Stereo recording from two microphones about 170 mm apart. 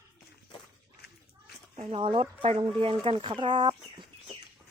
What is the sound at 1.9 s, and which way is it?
Speech, 30° right (ahead or behind).